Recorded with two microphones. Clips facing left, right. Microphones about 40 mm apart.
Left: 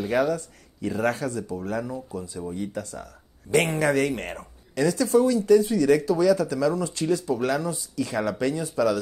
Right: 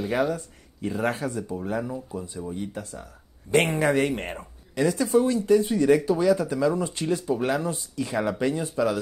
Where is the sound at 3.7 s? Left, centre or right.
Right.